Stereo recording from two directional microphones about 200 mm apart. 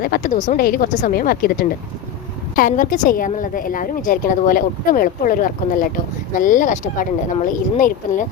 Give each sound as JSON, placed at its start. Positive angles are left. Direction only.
{"t": 0.0, "sound": "a woman's voice", "side_deg": 45}